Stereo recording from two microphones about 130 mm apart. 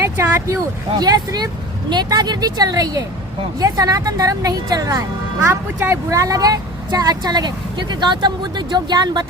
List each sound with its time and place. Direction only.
0.2 s a woman's voice: 20° right (ahead or behind)
0.9 s a woman's voice: 30° right (ahead or behind)